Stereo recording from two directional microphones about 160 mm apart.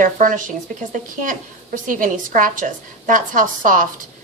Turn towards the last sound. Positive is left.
turn(degrees=-55)  # may be behind; listen again after turning